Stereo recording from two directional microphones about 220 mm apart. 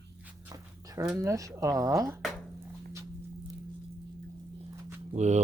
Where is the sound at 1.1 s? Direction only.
15° right (ahead or behind).